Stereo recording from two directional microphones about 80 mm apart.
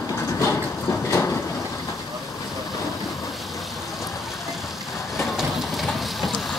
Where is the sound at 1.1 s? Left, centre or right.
Left.